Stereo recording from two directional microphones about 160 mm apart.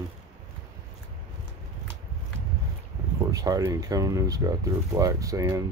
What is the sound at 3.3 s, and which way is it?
Speech, 20° right (ahead or behind).